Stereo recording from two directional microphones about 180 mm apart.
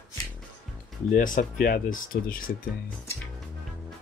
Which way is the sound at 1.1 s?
50° left (ahead or behind).